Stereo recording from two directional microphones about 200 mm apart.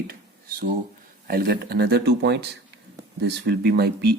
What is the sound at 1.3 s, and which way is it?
Speech, 50° right (ahead or behind).